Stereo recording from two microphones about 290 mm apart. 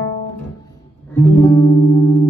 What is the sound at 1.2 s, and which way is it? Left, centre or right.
Music, centre.